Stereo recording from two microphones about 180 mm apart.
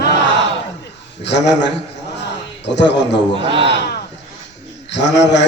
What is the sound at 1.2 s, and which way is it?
A man's voice, 75° left (ahead or behind).